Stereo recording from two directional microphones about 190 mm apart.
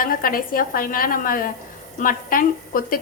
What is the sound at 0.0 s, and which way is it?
A woman's voice, 50° left (ahead or behind).